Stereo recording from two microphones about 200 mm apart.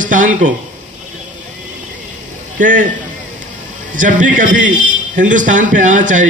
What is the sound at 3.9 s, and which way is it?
A man's voice, 40° right (ahead or behind).